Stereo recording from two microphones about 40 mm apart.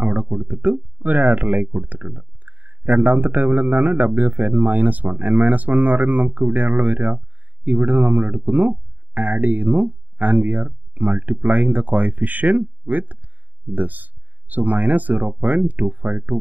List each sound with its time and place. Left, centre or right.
0.0 s speech: right